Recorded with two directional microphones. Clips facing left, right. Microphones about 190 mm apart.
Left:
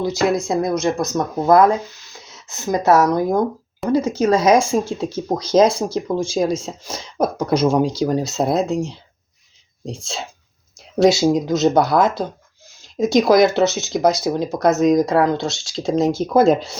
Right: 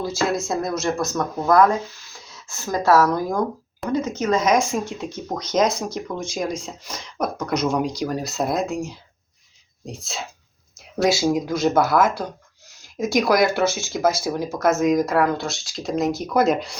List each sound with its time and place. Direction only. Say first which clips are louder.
0.0 s speech: left 5 dB; 20° left (ahead or behind)
10.8 s speech: left 6 dB; 25° left (ahead or behind)